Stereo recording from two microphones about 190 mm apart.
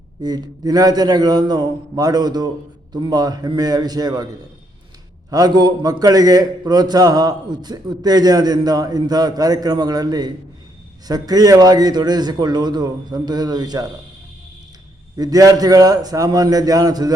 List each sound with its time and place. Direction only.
0.2 s a man's voice: 20° right (ahead or behind)
5.3 s a man's voice: 20° right (ahead or behind)
15.1 s a man's voice: 20° right (ahead or behind)